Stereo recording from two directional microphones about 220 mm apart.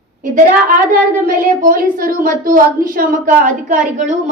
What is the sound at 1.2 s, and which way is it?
A woman's voice, 40° right (ahead or behind).